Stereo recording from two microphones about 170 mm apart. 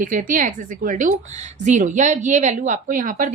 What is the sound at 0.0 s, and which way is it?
A woman's voice, 50° right (ahead or behind).